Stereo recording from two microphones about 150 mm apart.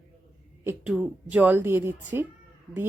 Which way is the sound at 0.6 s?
10° right (ahead or behind).